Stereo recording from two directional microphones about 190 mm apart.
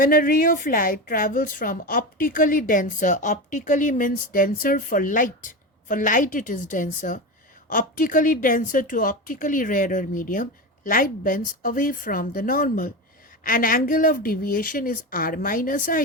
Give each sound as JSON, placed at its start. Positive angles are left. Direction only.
{"t": 0.0, "sound": "a woman's voice", "side_deg": 45}